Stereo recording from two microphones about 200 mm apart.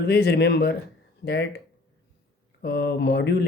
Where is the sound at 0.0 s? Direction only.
55° left (ahead or behind).